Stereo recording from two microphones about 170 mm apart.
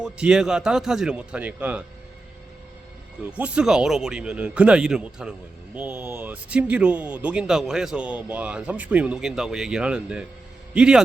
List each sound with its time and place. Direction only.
0.0 s speech: 5° right (ahead or behind)
3.2 s speech: 10° right (ahead or behind)